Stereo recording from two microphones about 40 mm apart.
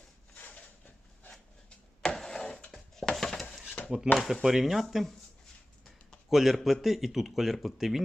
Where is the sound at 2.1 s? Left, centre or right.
Centre.